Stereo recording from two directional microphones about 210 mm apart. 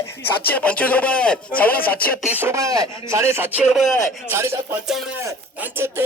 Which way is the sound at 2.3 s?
10° right (ahead or behind).